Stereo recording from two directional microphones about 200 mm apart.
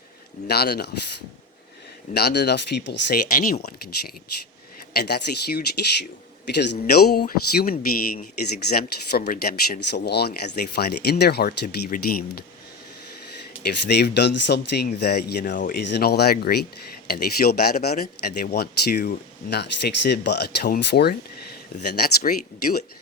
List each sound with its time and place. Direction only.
0.4 s speech: 55° left (ahead or behind)
2.1 s speech: 55° left (ahead or behind)
4.9 s speech: 50° left (ahead or behind)
13.7 s speech: 55° left (ahead or behind)